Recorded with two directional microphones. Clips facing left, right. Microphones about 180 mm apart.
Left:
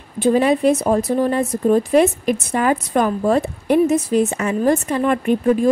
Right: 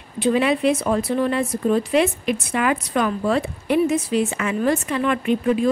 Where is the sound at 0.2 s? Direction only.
40° left (ahead or behind).